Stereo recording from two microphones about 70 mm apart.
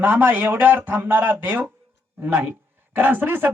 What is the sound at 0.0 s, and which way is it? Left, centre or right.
Speech, right.